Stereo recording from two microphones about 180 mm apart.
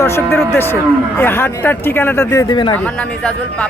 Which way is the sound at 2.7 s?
5° left (ahead or behind).